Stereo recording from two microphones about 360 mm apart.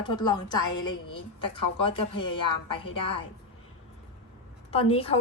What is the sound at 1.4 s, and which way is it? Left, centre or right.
Speech, left.